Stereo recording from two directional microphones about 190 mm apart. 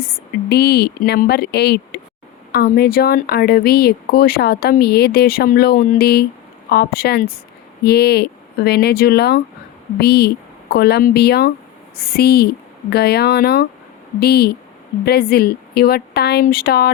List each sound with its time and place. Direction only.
0.0 s speech: 55° left (ahead or behind)